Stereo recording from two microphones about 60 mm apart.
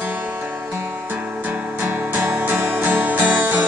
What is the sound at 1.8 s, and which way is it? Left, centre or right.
Music, right.